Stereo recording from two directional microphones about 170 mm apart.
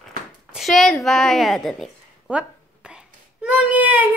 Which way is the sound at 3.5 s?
5° right (ahead or behind).